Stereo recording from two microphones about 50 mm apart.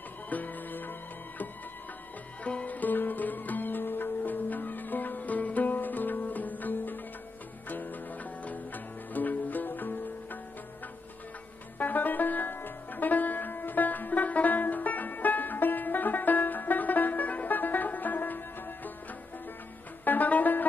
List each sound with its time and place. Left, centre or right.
0.3 s music: left
2.4 s music: left
11.8 s music: left
20.1 s music: left